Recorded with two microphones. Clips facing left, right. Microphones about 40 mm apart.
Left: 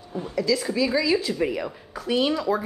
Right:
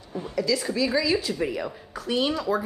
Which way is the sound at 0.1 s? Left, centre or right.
Centre.